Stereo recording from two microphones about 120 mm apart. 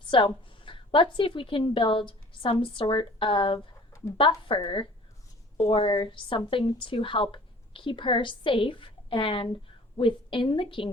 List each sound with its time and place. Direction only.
0.1 s a woman's voice: 45° left (ahead or behind)